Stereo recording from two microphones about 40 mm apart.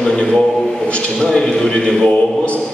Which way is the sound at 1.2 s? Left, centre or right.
Centre.